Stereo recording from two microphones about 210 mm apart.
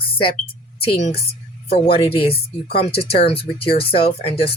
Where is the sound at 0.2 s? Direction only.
25° left (ahead or behind).